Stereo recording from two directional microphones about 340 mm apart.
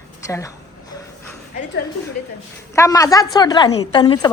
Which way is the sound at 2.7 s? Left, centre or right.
Centre.